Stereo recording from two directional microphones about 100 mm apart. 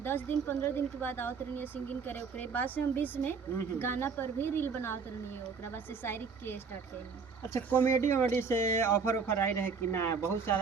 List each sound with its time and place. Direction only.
0.0 s speech: 20° left (ahead or behind)
7.7 s speech: 15° left (ahead or behind)